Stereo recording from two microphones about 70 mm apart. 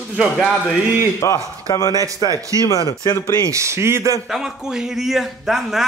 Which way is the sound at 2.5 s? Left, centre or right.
Left.